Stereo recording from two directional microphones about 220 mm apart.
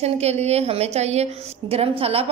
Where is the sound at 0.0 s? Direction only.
30° right (ahead or behind).